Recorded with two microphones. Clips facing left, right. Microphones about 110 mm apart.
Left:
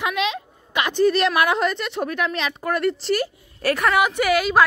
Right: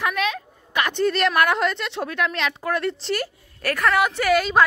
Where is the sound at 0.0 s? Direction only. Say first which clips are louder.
Left 1 dB; 20° left (ahead or behind).